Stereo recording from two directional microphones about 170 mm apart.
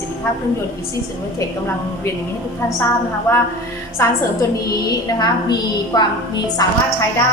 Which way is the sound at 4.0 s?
15° left (ahead or behind).